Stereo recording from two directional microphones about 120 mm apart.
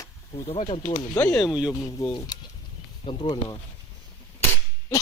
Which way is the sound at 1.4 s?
5° right (ahead or behind).